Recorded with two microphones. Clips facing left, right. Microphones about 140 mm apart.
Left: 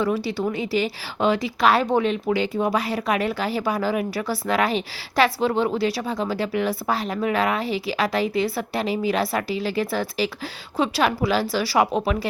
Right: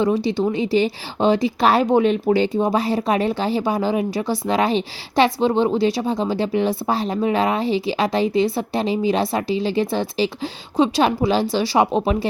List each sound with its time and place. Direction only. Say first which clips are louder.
0.0 s speech: right 4 dB; 20° right (ahead or behind)